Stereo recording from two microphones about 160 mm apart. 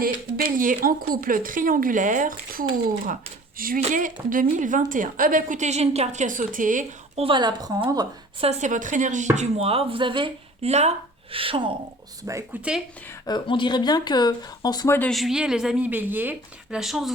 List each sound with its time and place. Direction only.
0.0 s a woman's voice: 60° right (ahead or behind)
3.8 s a woman's voice: 50° right (ahead or behind)
7.2 s a woman's voice: 30° right (ahead or behind)
8.4 s speech: 45° right (ahead or behind)
12.2 s a woman's voice: 20° right (ahead or behind)
13.2 s speech: 30° left (ahead or behind)
15.1 s a woman's voice: centre (ahead or behind)
16.7 s a woman's voice: centre (ahead or behind)